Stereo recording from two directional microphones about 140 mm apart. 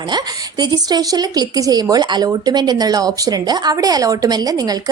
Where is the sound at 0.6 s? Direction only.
30° right (ahead or behind).